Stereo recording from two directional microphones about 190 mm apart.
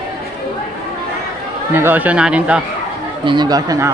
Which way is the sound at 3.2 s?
25° right (ahead or behind).